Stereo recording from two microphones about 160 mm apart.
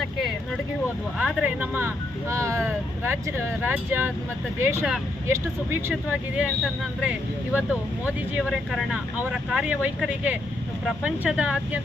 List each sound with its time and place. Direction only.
0.0 s vehicle: centre (ahead or behind)
1.2 s speech: 10° right (ahead or behind)
5.9 s speech: 5° right (ahead or behind)